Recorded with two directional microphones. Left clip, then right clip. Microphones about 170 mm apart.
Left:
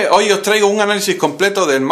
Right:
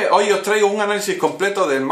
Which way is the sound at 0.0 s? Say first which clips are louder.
Left 3 dB; 40° left (ahead or behind).